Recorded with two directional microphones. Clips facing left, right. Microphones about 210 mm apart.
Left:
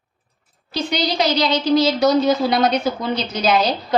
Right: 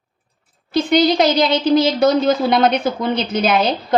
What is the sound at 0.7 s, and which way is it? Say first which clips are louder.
A woman's voice: right 8 dB; 50° right (ahead or behind).